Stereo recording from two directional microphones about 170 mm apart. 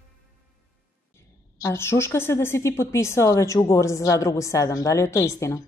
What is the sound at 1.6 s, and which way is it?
A woman's voice, 15° left (ahead or behind).